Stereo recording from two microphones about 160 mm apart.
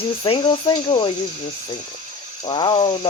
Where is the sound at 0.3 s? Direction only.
35° left (ahead or behind).